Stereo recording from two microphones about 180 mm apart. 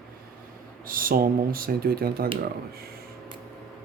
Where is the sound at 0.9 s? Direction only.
50° right (ahead or behind).